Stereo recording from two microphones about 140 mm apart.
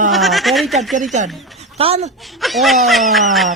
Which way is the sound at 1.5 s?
45° right (ahead or behind).